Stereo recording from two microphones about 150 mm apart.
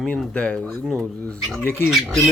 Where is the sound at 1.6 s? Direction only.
15° left (ahead or behind).